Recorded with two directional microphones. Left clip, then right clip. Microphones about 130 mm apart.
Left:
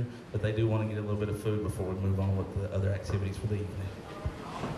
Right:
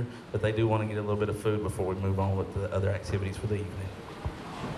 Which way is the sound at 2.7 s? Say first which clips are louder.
Right 4 dB; 15° right (ahead or behind).